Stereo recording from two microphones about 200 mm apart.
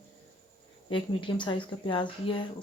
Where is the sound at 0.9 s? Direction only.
25° left (ahead or behind).